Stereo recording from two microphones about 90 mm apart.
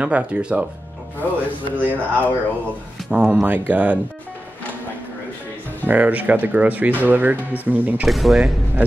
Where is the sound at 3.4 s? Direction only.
20° right (ahead or behind).